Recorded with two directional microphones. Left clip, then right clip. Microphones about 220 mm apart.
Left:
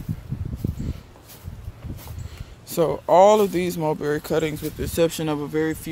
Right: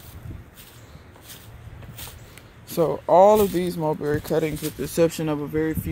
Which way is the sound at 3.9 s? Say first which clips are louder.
Left 1 dB; 20° left (ahead or behind).